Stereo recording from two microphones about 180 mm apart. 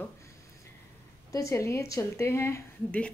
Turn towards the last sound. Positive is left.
turn(degrees=10)  # may be behind; listen again after turning